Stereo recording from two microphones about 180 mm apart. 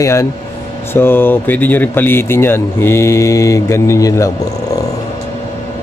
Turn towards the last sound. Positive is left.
turn(degrees=20)  # may be behind; listen again after turning